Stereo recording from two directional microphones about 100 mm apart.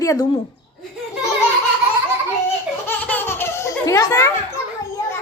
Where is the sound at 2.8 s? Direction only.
20° left (ahead or behind).